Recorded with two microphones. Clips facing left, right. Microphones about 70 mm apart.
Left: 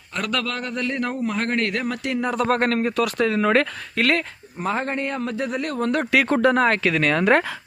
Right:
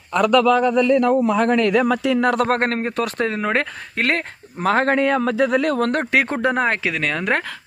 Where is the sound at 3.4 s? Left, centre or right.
Centre.